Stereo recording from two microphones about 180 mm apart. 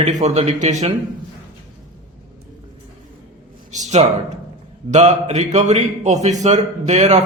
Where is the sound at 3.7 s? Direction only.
40° right (ahead or behind).